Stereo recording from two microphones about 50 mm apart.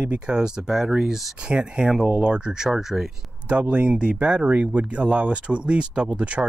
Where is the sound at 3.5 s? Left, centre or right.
Right.